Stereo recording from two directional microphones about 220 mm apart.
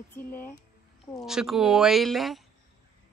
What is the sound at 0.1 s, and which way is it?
Speech, 10° left (ahead or behind).